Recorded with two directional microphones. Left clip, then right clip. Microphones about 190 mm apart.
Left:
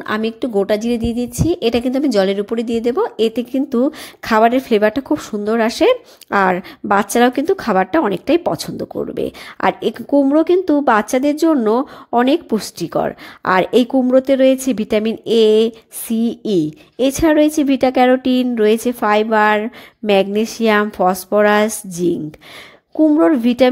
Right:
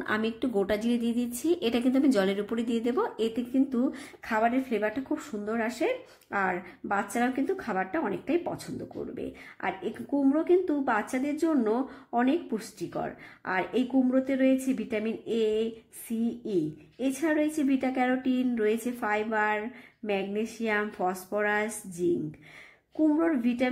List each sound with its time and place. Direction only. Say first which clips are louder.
0.0 s a woman's voice: left 10 dB; 30° left (ahead or behind)
22.9 s a woman's voice: left 13 dB; 40° left (ahead or behind)